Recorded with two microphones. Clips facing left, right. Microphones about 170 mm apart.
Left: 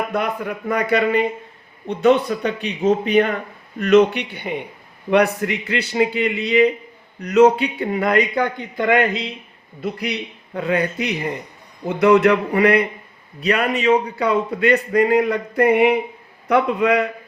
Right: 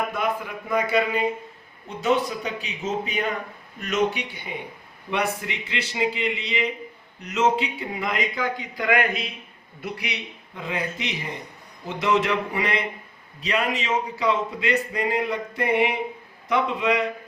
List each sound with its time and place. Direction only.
0.1 s a man's voice: 65° left (ahead or behind)
8.7 s speech: 25° left (ahead or behind)
10.1 s a man's voice: 70° left (ahead or behind)